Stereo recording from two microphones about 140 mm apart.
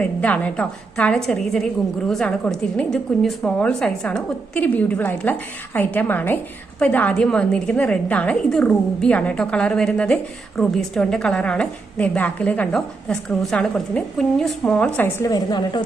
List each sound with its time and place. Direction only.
0.0 s a woman's voice: 10° left (ahead or behind)
15.2 s a woman's voice: 25° left (ahead or behind)